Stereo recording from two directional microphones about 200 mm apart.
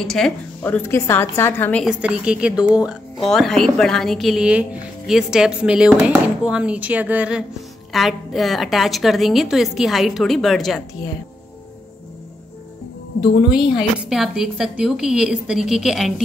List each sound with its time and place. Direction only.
0.0 s a woman's voice: centre (ahead or behind)
1.9 s a woman's voice: 5° right (ahead or behind)
13.2 s a woman's voice: 25° left (ahead or behind)
13.6 s a woman's voice: 5° right (ahead or behind)